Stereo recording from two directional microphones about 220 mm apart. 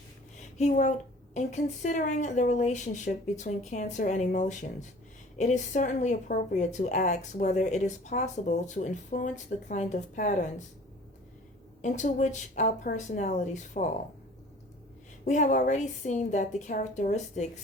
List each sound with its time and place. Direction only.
0.3 s a woman's voice: 30° left (ahead or behind)
11.8 s a woman's voice: 35° left (ahead or behind)
15.2 s a woman's voice: 35° left (ahead or behind)